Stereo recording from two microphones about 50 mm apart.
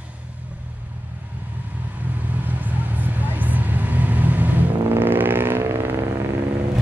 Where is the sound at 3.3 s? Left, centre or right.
Right.